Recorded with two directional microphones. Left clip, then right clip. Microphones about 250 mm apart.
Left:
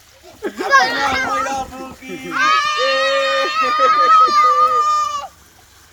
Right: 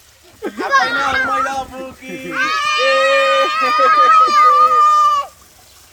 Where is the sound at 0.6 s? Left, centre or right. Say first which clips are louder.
Left 1 dB; left.